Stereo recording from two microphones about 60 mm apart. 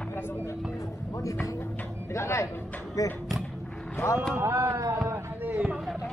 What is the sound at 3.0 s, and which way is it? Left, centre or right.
Speech, left.